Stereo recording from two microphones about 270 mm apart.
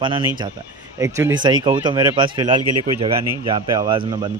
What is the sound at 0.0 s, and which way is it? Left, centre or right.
Speech, centre.